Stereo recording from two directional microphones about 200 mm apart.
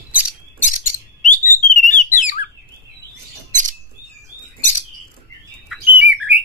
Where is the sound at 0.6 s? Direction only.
40° left (ahead or behind).